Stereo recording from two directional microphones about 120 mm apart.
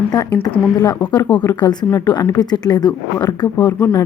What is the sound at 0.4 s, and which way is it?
Speech, 30° left (ahead or behind).